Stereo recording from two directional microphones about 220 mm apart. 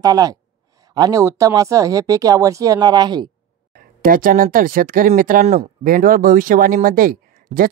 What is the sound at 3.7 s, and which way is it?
Speech, 40° right (ahead or behind).